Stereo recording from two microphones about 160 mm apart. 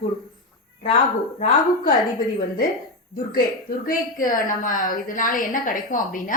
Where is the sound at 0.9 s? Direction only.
55° left (ahead or behind).